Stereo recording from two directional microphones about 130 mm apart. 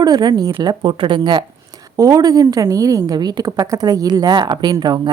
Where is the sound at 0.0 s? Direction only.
30° right (ahead or behind).